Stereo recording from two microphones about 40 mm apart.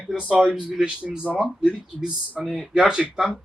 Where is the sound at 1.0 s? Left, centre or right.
Right.